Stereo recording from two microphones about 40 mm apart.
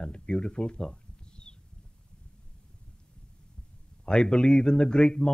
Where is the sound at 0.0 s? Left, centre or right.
Centre.